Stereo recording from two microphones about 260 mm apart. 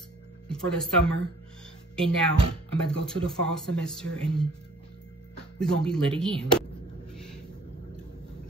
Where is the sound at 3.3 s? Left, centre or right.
Centre.